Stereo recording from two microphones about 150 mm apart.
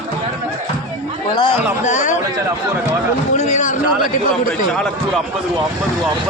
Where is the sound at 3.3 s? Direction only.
50° left (ahead or behind).